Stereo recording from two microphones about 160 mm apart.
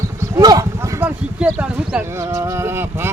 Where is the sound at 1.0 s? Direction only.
5° right (ahead or behind).